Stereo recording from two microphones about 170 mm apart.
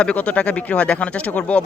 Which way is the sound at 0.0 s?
5° left (ahead or behind).